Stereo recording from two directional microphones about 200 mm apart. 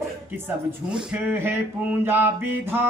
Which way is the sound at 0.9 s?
5° right (ahead or behind).